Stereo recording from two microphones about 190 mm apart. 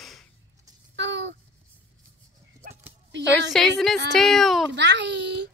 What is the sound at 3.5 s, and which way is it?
A woman's voice, 5° left (ahead or behind).